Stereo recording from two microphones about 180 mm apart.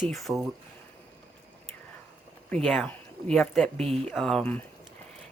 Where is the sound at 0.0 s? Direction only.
Centre (ahead or behind).